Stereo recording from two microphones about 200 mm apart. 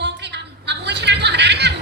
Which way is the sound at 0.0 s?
60° right (ahead or behind).